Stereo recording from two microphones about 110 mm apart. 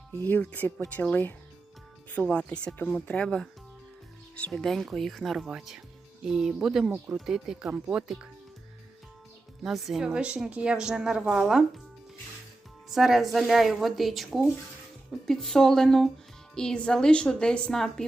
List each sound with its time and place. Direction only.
0.1 s a woman's voice: 15° left (ahead or behind); by 8.3 s 5° right (ahead or behind)
9.6 s a woman's voice: centre (ahead or behind)
12.9 s a woman's voice: centre (ahead or behind)